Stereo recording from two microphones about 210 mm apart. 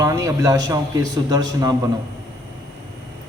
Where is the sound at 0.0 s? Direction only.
15° right (ahead or behind).